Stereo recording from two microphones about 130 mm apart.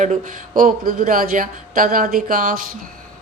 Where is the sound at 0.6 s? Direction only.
90° right.